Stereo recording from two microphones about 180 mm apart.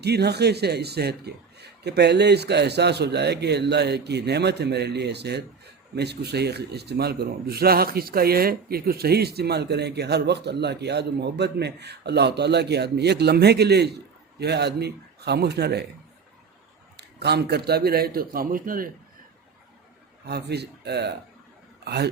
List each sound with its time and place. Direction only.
0.0 s a man's voice: 65° right (ahead or behind)
17.0 s a man's voice: 65° right (ahead or behind); by 18.9 s 50° right (ahead or behind)
20.2 s a man's voice: 65° right (ahead or behind)